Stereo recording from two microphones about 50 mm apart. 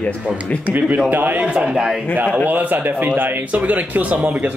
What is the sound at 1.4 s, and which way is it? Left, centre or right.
Speech, right.